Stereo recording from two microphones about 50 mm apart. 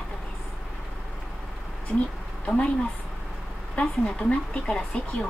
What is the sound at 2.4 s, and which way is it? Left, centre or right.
Speech, centre.